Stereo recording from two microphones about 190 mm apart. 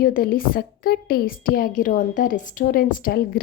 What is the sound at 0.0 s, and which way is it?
A woman's voice, 50° left (ahead or behind).